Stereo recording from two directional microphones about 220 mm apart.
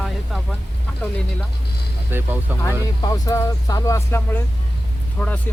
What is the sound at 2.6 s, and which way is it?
Speech, 15° left (ahead or behind).